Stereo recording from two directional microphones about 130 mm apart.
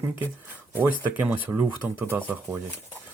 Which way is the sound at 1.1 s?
10° right (ahead or behind).